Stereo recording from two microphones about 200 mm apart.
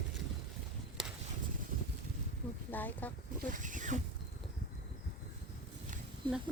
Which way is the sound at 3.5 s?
40° right (ahead or behind).